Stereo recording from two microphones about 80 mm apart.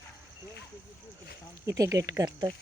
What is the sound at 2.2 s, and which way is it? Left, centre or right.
Speech, right.